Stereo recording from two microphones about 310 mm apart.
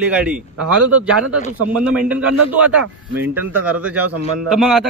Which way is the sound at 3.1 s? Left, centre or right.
Centre.